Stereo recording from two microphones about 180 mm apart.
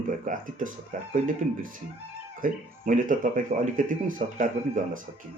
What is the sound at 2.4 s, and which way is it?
Speech, 50° right (ahead or behind).